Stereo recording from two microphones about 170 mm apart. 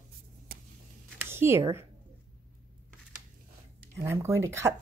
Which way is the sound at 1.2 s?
15° right (ahead or behind).